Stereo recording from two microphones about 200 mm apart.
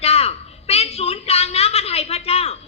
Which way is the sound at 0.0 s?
30° left (ahead or behind).